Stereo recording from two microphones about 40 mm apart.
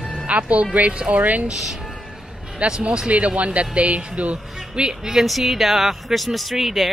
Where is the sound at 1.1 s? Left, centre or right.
Right.